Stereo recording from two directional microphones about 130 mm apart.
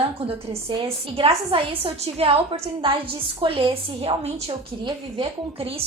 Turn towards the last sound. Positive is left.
turn(degrees=-45)  # may be behind; listen again after turning